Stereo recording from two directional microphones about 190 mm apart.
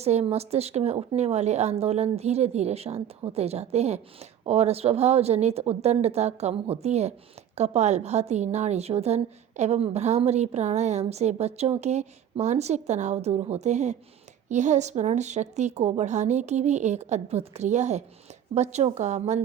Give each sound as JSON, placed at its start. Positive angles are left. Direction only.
{"t": 0.0, "sound": "a woman's voice", "side_deg": -35}